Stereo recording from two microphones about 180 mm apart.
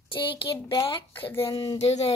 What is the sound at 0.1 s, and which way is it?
Speech, 30° left (ahead or behind).